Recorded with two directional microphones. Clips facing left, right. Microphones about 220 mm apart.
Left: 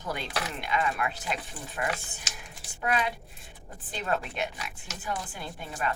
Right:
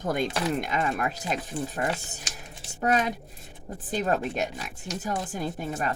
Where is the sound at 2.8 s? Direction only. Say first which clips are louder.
Right 4 dB; 40° right (ahead or behind).